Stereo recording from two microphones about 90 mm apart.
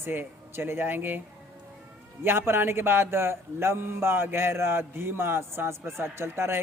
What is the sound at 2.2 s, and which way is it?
A man's voice, 25° right (ahead or behind).